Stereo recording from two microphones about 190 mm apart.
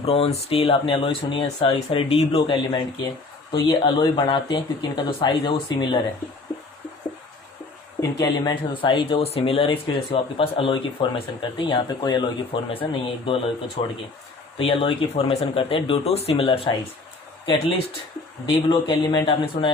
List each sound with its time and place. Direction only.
0.0 s speech: 30° left (ahead or behind)
8.0 s speech: 20° left (ahead or behind)
18.4 s speech: 25° left (ahead or behind)